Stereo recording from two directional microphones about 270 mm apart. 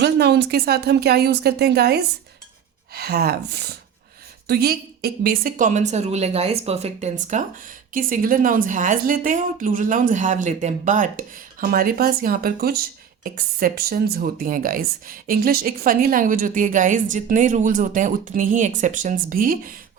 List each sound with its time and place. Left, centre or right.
0.0 s a woman's voice: right